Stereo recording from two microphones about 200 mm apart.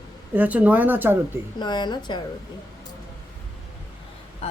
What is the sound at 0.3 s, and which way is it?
Speech, 10° right (ahead or behind).